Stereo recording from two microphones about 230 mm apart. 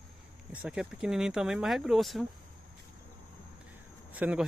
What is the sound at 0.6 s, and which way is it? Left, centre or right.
Speech, centre.